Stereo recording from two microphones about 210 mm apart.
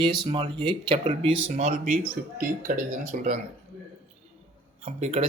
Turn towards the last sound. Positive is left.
turn(degrees=-30)  # may be behind; listen again after turning